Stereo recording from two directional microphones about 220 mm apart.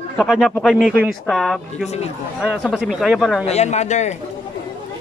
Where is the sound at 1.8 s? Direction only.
30° left (ahead or behind).